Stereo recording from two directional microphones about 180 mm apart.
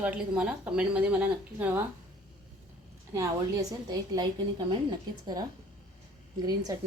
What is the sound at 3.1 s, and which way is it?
Speech, 15° right (ahead or behind).